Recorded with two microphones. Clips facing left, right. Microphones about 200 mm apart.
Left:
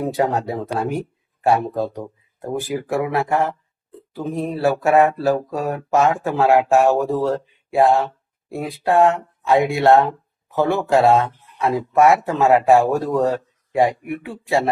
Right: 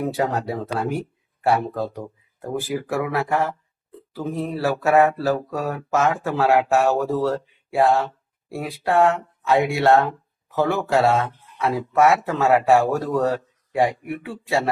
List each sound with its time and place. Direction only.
0.0 s mantra: 20° left (ahead or behind)
2.6 s speech: 20° left (ahead or behind)
4.1 s mantra: 20° left (ahead or behind)
10.5 s speech: 20° left (ahead or behind)
11.6 s mantra: 15° left (ahead or behind)